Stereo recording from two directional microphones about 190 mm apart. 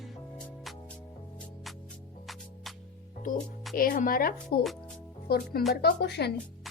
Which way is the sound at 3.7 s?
50° left (ahead or behind).